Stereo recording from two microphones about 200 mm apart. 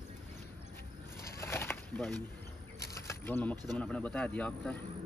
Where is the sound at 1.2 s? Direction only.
15° left (ahead or behind).